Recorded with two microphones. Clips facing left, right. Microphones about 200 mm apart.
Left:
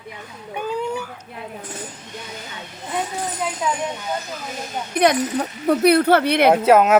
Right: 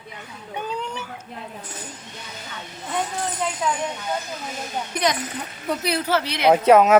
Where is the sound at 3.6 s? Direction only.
5° left (ahead or behind).